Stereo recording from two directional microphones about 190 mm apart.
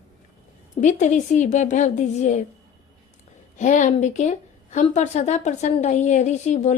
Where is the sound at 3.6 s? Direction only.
40° left (ahead or behind).